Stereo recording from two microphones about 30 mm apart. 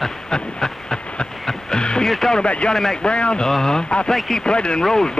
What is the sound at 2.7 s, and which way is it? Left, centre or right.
Speech, centre.